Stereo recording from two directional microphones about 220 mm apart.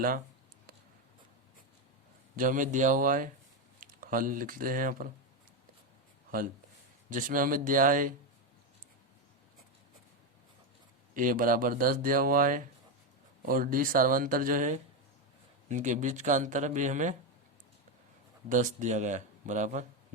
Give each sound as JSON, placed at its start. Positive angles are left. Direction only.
{"t": 2.3, "sound": "speech", "side_deg": -35}
{"t": 7.1, "sound": "speech", "side_deg": -35}
{"t": 11.1, "sound": "speech", "side_deg": -40}
{"t": 18.4, "sound": "speech", "side_deg": -35}